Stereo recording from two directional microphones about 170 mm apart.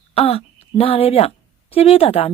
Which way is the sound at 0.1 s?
35° left (ahead or behind).